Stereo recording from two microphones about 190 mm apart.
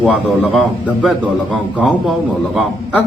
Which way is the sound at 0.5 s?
Centre (ahead or behind).